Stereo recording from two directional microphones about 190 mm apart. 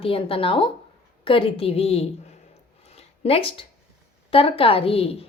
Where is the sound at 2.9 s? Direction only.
30° left (ahead or behind).